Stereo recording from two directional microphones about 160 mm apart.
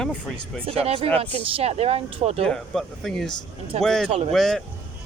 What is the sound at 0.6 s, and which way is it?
Speech, 35° right (ahead or behind).